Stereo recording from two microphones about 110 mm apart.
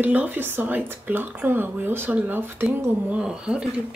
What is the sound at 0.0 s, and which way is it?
Speech, 15° right (ahead or behind).